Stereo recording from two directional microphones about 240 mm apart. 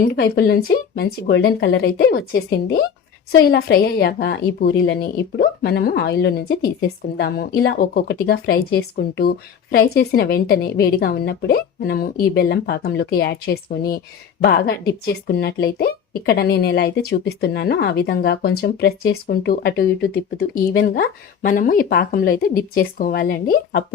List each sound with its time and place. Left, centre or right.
0.1 s a woman's voice: left